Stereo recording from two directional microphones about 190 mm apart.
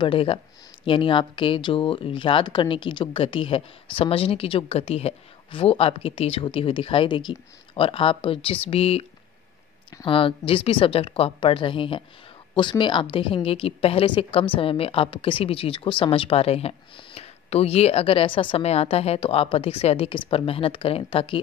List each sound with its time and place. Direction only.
0.0 s speech: 30° left (ahead or behind)
10.0 s speech: 30° left (ahead or behind)